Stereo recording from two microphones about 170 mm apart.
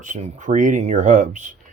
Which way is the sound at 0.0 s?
45° right (ahead or behind).